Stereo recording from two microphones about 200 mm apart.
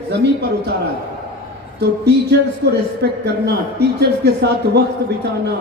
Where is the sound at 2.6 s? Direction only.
55° right (ahead or behind).